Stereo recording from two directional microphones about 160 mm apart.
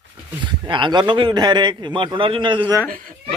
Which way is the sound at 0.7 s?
30° right (ahead or behind).